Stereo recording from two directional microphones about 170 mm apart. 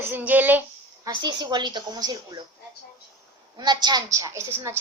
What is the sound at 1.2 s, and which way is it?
A woman's voice, 25° right (ahead or behind).